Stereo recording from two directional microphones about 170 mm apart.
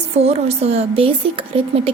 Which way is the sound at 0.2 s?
35° right (ahead or behind).